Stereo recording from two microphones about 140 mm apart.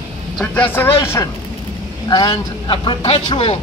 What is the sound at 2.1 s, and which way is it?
A man's voice, 30° left (ahead or behind).